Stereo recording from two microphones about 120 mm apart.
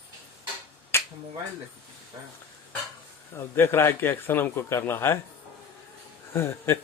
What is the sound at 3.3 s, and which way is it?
A man's voice, 20° left (ahead or behind).